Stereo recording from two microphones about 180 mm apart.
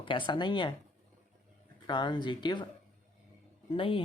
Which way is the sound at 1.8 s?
25° left (ahead or behind).